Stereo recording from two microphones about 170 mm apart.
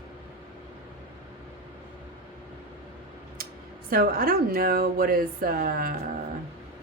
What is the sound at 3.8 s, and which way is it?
Speech, 60° right (ahead or behind).